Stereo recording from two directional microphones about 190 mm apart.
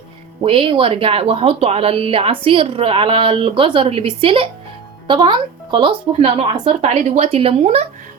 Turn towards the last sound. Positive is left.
turn(degrees=-35)  # may be behind; listen again after turning